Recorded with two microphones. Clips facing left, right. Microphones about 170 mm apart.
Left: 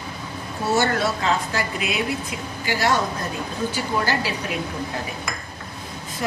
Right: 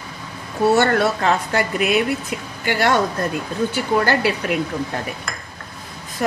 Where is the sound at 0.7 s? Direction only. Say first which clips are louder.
Right 1 dB; 60° right (ahead or behind).